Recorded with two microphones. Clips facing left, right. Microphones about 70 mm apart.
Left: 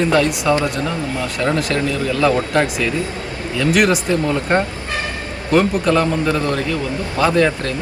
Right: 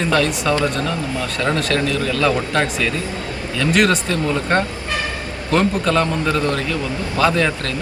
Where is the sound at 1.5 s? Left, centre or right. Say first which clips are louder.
Even; centre.